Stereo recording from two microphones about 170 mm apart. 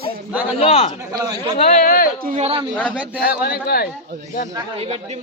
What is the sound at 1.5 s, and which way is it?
Speech, 45° left (ahead or behind).